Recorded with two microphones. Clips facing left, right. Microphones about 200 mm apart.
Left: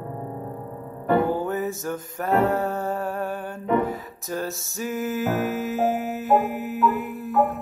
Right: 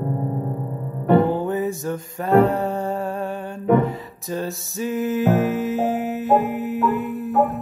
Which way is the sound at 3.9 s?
Centre (ahead or behind).